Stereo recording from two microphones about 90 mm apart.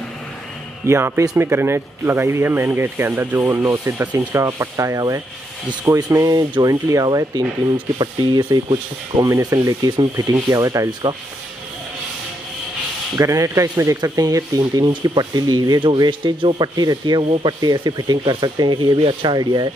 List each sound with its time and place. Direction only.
0.8 s a man's voice: 30° right (ahead or behind); by 9.2 s 55° right (ahead or behind)
9.4 s speech: 45° right (ahead or behind)
10.2 s speech: 40° right (ahead or behind)
10.9 s speech: 55° right (ahead or behind)
13.1 s speech: 40° right (ahead or behind); by 16.6 s 65° right (ahead or behind)
16.6 s speech: 50° right (ahead or behind)
17.2 s speech: 80° right
17.6 s speech: 50° right (ahead or behind)